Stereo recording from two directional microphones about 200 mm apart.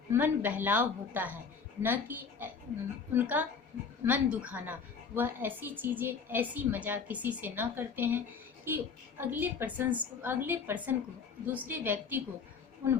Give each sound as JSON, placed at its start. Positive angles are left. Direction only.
{"t": 0.1, "sound": "a woman's voice", "side_deg": -10}